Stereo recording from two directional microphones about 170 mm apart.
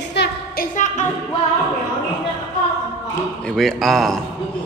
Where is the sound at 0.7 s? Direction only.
45° left (ahead or behind).